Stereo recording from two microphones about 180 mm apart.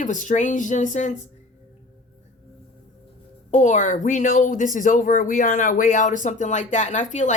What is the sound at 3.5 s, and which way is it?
Speech, 45° left (ahead or behind).